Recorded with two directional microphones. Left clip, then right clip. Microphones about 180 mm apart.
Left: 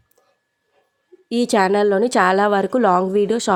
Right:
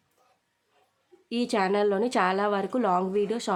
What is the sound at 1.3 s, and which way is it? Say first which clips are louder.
A woman's voice: left 9 dB; 35° left (ahead or behind).